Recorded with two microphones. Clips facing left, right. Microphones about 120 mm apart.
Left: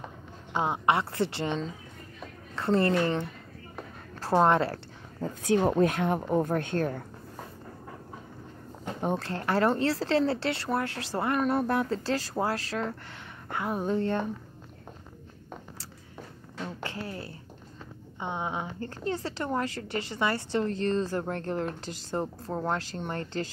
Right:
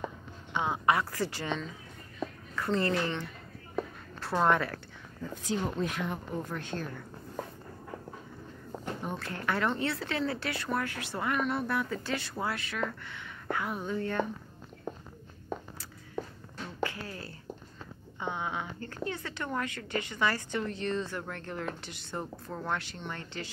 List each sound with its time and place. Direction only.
0.5 s a woman's voice: 30° left (ahead or behind)
5.2 s speech: 65° left (ahead or behind)
9.2 s a woman's voice: 35° left (ahead or behind)
16.9 s a woman's voice: 30° left (ahead or behind)